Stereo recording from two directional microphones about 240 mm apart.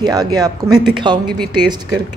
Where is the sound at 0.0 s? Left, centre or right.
Centre.